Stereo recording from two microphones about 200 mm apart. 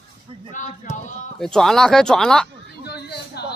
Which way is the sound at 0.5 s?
40° left (ahead or behind).